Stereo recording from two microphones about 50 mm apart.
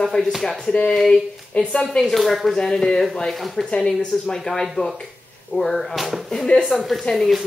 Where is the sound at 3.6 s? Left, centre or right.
Centre.